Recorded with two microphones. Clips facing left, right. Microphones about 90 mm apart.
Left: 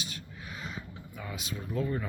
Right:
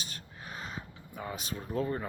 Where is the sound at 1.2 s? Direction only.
35° right (ahead or behind).